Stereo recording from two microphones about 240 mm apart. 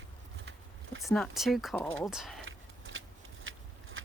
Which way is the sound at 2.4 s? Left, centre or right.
Right.